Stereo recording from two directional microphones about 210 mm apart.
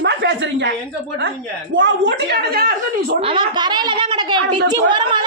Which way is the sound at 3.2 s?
25° right (ahead or behind).